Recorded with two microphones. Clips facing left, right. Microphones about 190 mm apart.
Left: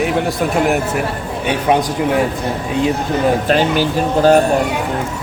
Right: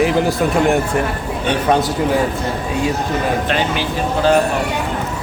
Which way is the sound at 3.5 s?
40° left (ahead or behind).